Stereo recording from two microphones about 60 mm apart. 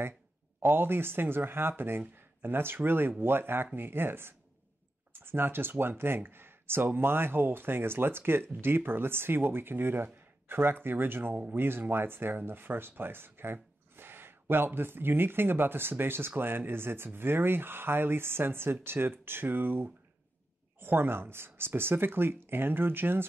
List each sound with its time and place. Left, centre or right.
0.6 s speech: right